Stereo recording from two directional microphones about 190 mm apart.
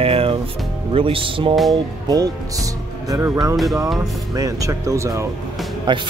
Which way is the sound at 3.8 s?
Centre (ahead or behind).